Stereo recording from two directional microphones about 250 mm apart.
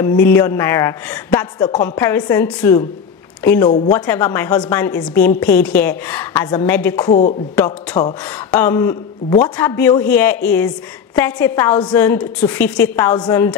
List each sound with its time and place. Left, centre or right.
0.0 s a woman's voice: centre
7.1 s speech: left
8.5 s a woman's voice: centre